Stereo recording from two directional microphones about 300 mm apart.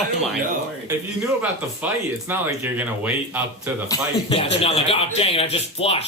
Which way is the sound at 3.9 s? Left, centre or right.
Centre.